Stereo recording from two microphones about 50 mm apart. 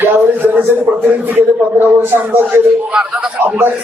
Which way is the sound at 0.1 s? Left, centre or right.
Right.